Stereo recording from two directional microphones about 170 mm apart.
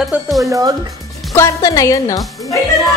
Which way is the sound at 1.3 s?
15° left (ahead or behind).